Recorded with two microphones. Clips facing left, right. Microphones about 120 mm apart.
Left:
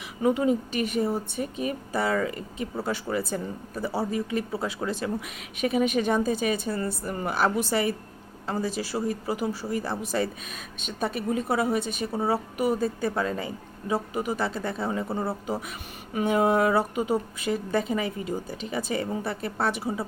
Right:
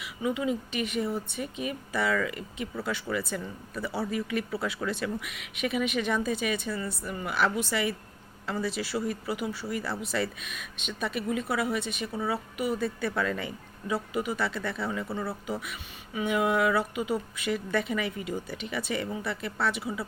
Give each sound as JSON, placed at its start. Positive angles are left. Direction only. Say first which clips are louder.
{"t": 0.2, "sound": "speech", "louder": "left 6 dB", "side_deg": 40}
{"t": 15.2, "sound": "speech", "louder": "left 4 dB", "side_deg": 25}
{"t": 16.2, "sound": "speech", "louder": "left 3 dB", "side_deg": 35}